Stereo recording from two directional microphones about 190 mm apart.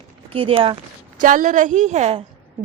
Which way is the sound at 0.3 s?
30° right (ahead or behind).